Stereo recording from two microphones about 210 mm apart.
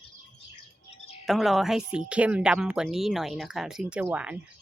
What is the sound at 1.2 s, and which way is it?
Speech, centre (ahead or behind).